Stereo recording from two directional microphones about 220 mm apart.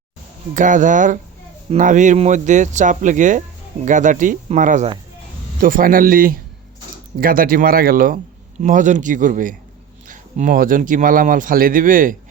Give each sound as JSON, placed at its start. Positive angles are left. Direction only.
{"t": 0.5, "sound": "a man's voice", "side_deg": -35}